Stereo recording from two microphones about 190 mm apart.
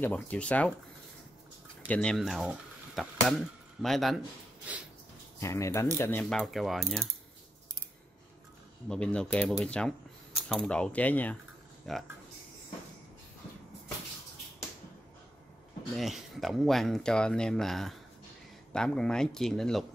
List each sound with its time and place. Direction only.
0.0 s speech: 5° left (ahead or behind)
1.9 s speech: 5° left (ahead or behind)
5.4 s speech: 15° left (ahead or behind)
8.8 s speech: 5° left (ahead or behind)
15.9 s speech: centre (ahead or behind)